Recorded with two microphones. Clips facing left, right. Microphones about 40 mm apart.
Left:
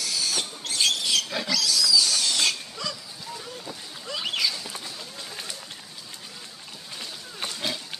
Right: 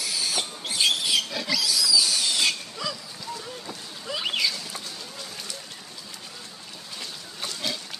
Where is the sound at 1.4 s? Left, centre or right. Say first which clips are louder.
Even; centre.